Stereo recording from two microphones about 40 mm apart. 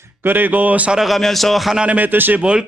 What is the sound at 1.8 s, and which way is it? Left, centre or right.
Speech, right.